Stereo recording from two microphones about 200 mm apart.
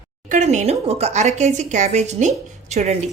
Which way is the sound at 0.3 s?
35° right (ahead or behind).